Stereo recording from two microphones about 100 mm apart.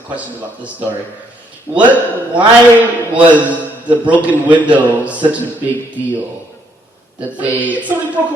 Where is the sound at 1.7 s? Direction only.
20° right (ahead or behind).